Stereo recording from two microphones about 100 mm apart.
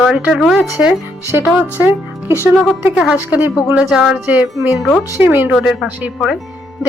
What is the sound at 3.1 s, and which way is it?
Speech, 15° right (ahead or behind).